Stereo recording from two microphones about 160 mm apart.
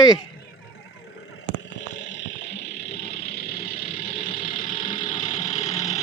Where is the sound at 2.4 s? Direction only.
90° left; by 4.6 s 60° left (ahead or behind).